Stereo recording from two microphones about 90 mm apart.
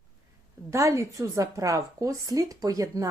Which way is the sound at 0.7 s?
35° right (ahead or behind).